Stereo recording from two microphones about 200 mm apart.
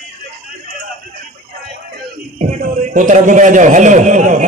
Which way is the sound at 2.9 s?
40° right (ahead or behind).